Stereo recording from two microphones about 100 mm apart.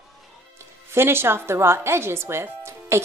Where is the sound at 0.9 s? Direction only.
25° right (ahead or behind).